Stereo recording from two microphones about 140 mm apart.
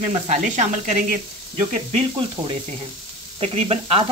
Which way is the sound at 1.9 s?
40° right (ahead or behind).